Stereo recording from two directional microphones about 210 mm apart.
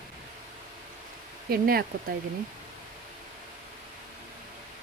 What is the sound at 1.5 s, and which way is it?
Speech, 45° right (ahead or behind).